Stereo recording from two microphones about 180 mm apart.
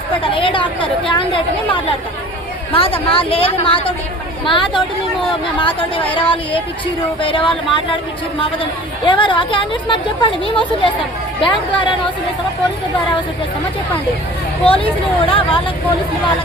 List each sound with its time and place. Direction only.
0.3 s speech: 30° left (ahead or behind)
2.7 s speech: 30° left (ahead or behind)
9.0 s speech: 25° left (ahead or behind)
14.6 s speech: 30° left (ahead or behind)